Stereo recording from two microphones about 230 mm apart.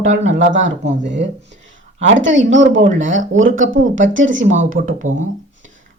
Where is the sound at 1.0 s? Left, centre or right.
Right.